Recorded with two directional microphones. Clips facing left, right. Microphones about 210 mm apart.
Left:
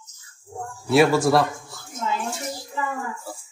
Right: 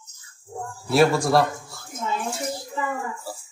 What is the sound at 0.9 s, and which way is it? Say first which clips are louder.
Speech: left 1 dB; centre (ahead or behind).